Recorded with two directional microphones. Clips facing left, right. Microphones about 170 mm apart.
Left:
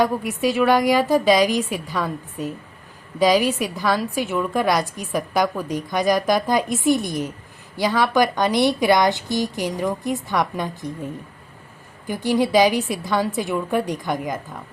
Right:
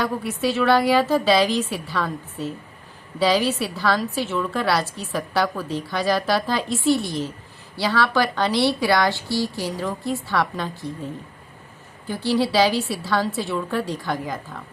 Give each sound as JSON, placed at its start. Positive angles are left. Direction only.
{"t": 0.0, "sound": "a woman's voice", "side_deg": 10}